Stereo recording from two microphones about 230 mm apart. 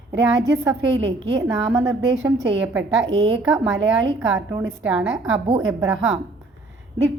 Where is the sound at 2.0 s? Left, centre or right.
Right.